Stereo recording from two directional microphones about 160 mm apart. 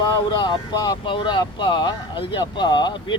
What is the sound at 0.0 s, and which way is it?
Speech, 30° left (ahead or behind).